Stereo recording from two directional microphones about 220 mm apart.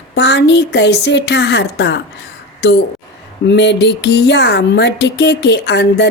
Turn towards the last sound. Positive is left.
turn(degrees=50)  # may be behind; listen again after turning